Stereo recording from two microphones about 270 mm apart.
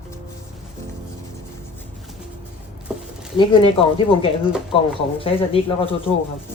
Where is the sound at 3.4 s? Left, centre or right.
Centre.